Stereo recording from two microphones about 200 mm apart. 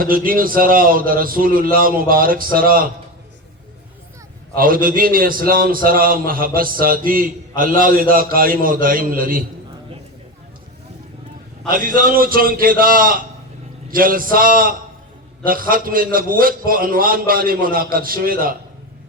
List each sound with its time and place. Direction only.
0.0 s a man's voice: 45° right (ahead or behind)
4.5 s a man's voice: 45° right (ahead or behind)
11.7 s a man's voice: 45° right (ahead or behind)